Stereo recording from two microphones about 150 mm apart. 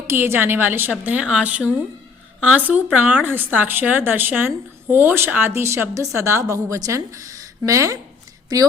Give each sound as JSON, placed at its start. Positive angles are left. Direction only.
{"t": 0.1, "sound": "a woman's voice", "side_deg": -15}